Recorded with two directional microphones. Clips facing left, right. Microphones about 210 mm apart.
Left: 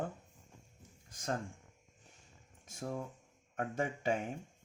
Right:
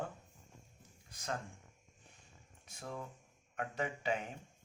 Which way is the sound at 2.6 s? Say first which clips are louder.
Left 5 dB; 45° left (ahead or behind).